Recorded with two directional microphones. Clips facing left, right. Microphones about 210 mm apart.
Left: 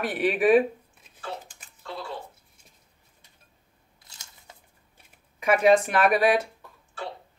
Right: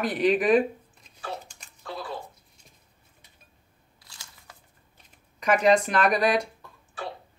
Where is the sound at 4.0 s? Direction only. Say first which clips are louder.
Right 2 dB; 20° left (ahead or behind).